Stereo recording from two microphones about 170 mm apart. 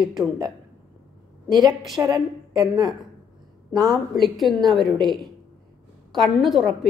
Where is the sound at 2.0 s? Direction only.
20° right (ahead or behind).